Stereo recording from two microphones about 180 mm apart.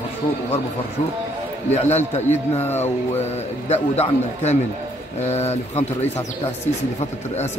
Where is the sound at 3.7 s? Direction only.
35° left (ahead or behind).